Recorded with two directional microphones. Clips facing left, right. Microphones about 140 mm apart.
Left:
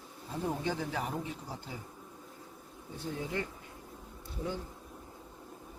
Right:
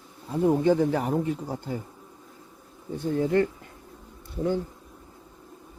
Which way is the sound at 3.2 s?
55° right (ahead or behind).